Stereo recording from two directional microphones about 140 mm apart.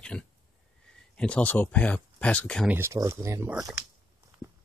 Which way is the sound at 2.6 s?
15° right (ahead or behind).